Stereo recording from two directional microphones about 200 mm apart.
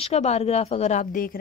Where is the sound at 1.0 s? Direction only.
45° left (ahead or behind).